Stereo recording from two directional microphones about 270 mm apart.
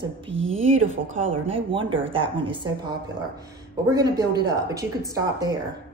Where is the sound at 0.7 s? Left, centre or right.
Right.